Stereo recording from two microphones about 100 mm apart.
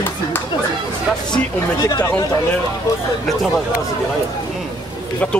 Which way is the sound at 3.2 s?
Centre (ahead or behind).